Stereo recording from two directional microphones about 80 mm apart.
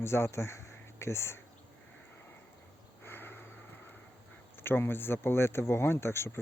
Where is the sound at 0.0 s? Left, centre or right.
Left.